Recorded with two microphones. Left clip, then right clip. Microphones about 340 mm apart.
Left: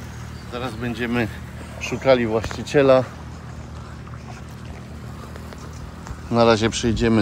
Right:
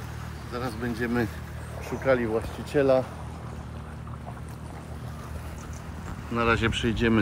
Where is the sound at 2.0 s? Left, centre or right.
Left.